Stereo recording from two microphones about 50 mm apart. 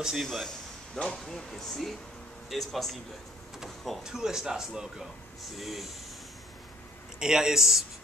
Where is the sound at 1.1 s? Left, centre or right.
Centre.